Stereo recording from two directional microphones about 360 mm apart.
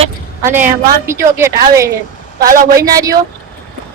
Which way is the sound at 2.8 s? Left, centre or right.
Centre.